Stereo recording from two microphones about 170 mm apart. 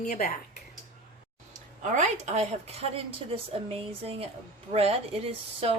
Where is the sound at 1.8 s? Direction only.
45° right (ahead or behind).